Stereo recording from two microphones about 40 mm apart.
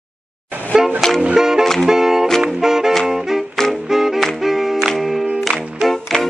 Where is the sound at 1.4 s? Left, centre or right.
Centre.